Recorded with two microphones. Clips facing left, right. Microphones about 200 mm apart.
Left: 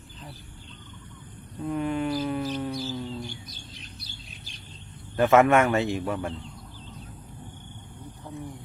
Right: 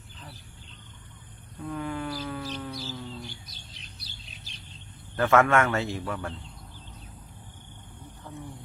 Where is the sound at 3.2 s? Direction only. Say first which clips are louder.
Left 5 dB; 50° left (ahead or behind).